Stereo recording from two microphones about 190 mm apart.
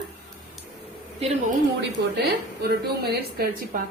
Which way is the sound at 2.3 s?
55° right (ahead or behind).